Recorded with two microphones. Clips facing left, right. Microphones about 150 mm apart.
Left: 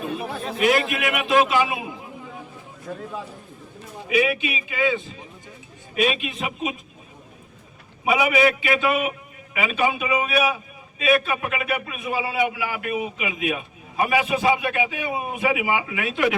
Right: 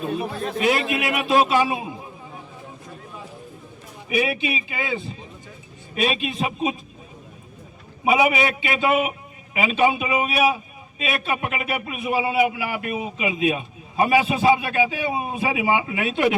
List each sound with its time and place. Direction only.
0.1 s a man's voice: 30° right (ahead or behind)
4.2 s a man's voice: 30° right (ahead or behind)
8.0 s a man's voice: 25° right (ahead or behind)